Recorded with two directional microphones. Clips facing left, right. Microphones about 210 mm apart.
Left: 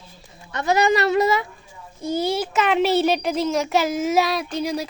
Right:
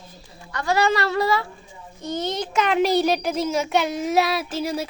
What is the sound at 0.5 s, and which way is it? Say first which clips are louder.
Speech: left 2 dB; 20° left (ahead or behind).